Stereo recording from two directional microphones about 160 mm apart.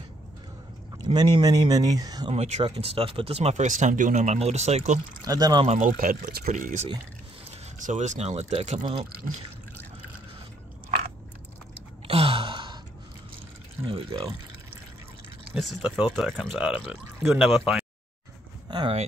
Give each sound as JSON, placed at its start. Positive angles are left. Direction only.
{"t": 0.9, "sound": "speech", "side_deg": -25}
{"t": 2.3, "sound": "speech", "side_deg": -45}
{"t": 5.2, "sound": "speech", "side_deg": -25}
{"t": 5.7, "sound": "speech", "side_deg": -50}
{"t": 12.1, "sound": "a sound", "side_deg": -35}
{"t": 13.8, "sound": "speech", "side_deg": -35}
{"t": 15.5, "sound": "speech", "side_deg": -5}
{"t": 18.7, "sound": "speech", "side_deg": -30}